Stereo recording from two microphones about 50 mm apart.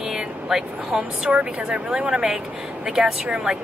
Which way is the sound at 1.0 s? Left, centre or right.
Right.